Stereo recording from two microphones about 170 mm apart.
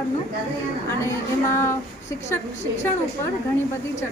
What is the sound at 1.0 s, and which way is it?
Speech, 15° left (ahead or behind).